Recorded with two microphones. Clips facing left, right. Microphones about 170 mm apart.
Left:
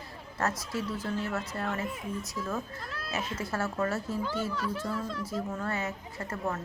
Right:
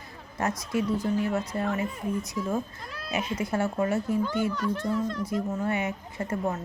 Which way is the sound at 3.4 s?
20° right (ahead or behind).